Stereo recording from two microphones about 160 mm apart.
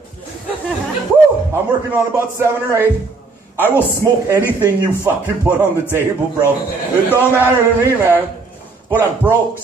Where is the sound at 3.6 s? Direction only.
15° left (ahead or behind).